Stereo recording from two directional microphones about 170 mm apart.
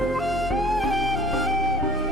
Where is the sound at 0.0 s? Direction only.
Centre (ahead or behind).